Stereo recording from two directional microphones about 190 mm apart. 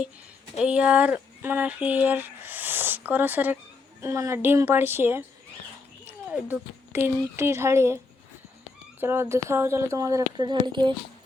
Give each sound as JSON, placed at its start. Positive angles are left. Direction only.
{"t": 0.5, "sound": "speech", "side_deg": -5}
{"t": 9.0, "sound": "speech", "side_deg": -15}